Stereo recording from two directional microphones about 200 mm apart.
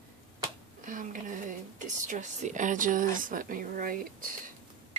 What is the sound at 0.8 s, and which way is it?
A woman's voice, 40° right (ahead or behind).